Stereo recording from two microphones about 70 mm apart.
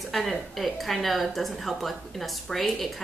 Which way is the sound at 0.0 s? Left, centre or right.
Centre.